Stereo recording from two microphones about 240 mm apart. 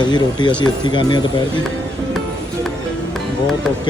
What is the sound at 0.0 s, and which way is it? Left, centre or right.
Speech, centre.